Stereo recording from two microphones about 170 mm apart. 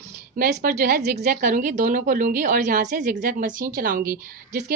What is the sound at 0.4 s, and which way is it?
A woman's voice, 60° right (ahead or behind).